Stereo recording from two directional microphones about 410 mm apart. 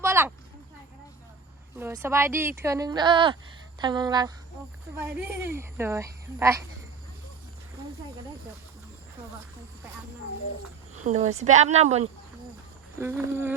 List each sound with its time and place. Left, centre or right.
0.0 s a sound: centre
1.8 s speech: centre
11.0 s speech: centre